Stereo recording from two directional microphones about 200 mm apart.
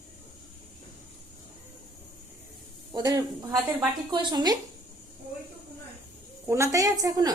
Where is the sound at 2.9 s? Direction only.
20° right (ahead or behind).